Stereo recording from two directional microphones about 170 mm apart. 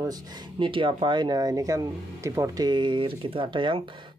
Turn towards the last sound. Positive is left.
turn(degrees=-30)  # may be behind; listen again after turning